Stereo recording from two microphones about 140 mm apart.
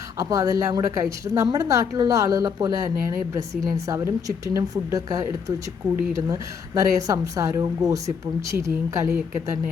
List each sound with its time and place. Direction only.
0.2 s a woman's voice: 25° right (ahead or behind)